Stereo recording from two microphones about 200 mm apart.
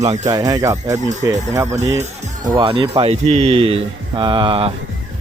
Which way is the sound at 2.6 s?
25° right (ahead or behind).